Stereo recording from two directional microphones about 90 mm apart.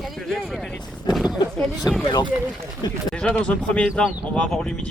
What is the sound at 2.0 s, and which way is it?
Speech, 55° left (ahead or behind).